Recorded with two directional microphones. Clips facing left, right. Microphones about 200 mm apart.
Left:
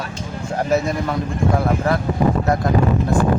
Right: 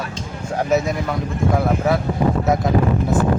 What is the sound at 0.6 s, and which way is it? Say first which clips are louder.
Speech: even; centre (ahead or behind).